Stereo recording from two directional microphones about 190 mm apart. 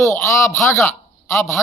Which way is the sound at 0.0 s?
15° left (ahead or behind).